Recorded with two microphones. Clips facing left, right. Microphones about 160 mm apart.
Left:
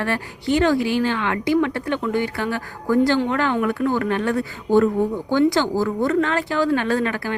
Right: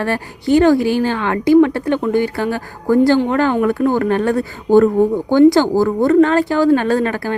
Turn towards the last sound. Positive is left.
turn(degrees=-40)  # may be behind; listen again after turning